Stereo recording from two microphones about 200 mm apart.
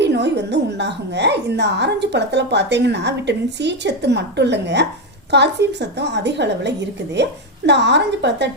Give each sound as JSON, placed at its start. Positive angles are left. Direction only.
{"t": 0.0, "sound": "a woman's voice", "side_deg": -60}